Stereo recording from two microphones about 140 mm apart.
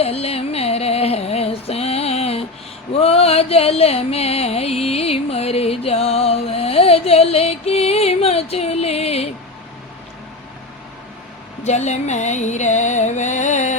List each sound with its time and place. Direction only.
0.0 s a sound: 45° left (ahead or behind)
2.9 s music: 45° left (ahead or behind)
11.6 s music: 55° left (ahead or behind)